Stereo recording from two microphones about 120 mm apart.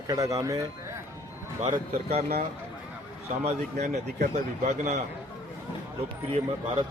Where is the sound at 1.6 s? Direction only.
60° right (ahead or behind).